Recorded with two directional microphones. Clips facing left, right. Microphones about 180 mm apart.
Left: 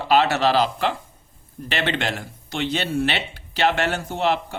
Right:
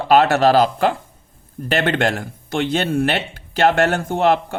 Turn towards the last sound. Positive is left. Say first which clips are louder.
# right 6 dB
turn(degrees=-50)  # may be behind; listen again after turning